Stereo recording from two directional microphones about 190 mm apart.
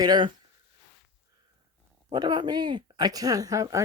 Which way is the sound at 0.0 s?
25° right (ahead or behind).